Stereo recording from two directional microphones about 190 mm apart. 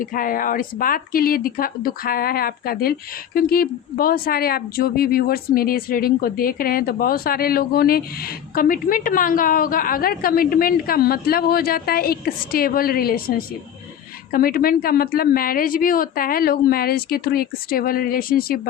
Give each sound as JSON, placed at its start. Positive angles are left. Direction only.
{"t": 0.0, "sound": "speech", "side_deg": 45}